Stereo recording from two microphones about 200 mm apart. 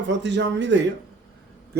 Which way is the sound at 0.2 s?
65° right (ahead or behind).